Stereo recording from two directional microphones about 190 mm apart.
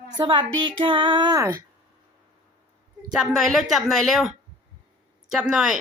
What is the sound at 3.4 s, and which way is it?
Speech, centre (ahead or behind).